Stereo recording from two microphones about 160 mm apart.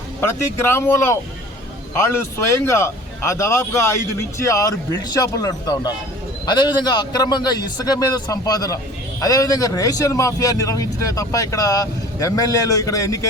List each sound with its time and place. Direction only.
0.2 s speech: 15° left (ahead or behind)